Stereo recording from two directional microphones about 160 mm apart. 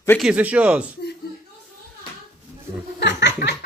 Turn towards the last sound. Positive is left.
turn(degrees=90)